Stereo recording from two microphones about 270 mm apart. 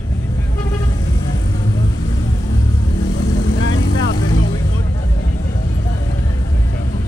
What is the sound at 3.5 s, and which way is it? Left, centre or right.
Vehicle, left.